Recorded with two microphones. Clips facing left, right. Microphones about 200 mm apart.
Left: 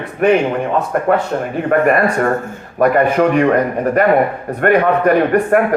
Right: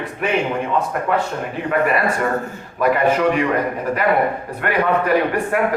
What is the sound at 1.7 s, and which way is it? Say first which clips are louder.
A man's voice: left 5 dB; 50° left (ahead or behind).